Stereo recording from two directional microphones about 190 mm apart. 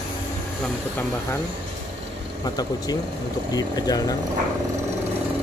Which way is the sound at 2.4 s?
20° left (ahead or behind).